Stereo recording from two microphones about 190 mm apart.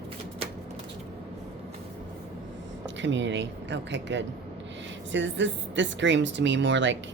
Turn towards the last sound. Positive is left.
turn(degrees=-70)  # may be behind; listen again after turning